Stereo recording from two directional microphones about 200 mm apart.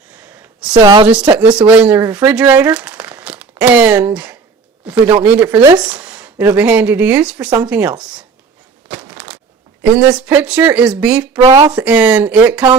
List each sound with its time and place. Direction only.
0.7 s a woman's voice: 20° right (ahead or behind)
1.0 s speech: 5° right (ahead or behind)
8.9 s a sound: 5° right (ahead or behind)
10.0 s speech: 5° right (ahead or behind)